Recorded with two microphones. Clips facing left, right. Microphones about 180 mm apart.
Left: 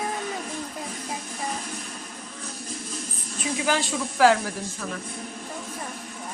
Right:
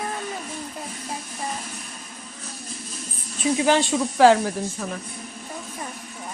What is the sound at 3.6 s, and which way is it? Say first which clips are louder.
Speech: right 5 dB; 25° right (ahead or behind).